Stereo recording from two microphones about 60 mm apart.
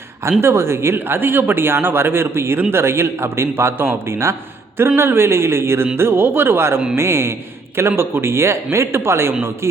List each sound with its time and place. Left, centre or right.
0.3 s a man's voice: right